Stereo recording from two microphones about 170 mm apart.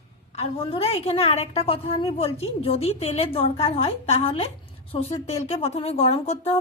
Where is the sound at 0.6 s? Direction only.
35° left (ahead or behind).